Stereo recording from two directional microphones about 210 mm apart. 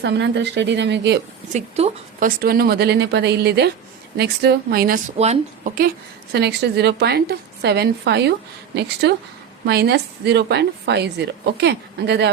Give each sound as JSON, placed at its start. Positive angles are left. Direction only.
{"t": 0.0, "sound": "speech", "side_deg": -55}
{"t": 1.5, "sound": "a woman's voice", "side_deg": -30}
{"t": 5.1, "sound": "speech", "side_deg": -30}
{"t": 6.3, "sound": "a woman's voice", "side_deg": -50}